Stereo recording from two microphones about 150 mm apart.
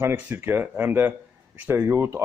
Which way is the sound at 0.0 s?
15° right (ahead or behind).